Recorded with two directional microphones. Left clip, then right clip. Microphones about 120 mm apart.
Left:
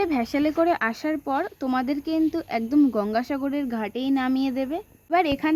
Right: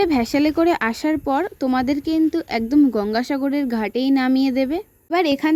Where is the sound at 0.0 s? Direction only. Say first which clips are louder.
Right 5 dB; 55° right (ahead or behind).